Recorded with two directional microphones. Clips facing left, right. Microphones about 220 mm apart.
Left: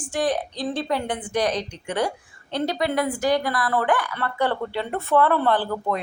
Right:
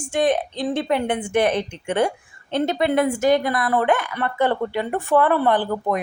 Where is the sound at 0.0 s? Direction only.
20° right (ahead or behind).